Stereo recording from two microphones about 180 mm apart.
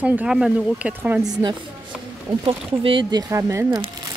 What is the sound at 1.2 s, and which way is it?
Speech, 20° right (ahead or behind).